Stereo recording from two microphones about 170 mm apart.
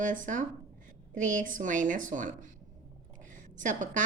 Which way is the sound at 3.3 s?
50° right (ahead or behind).